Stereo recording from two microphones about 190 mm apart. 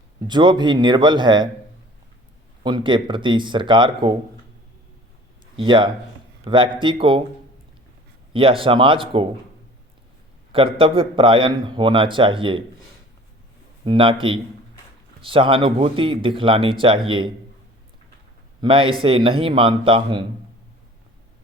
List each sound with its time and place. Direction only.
0.3 s a man's voice: 25° right (ahead or behind)
2.6 s a man's voice: 25° right (ahead or behind)
5.5 s a man's voice: 25° right (ahead or behind)
8.3 s a man's voice: 30° right (ahead or behind)
10.5 s a man's voice: 30° right (ahead or behind)
13.8 s a man's voice: 25° right (ahead or behind)
18.6 s a man's voice: 25° right (ahead or behind)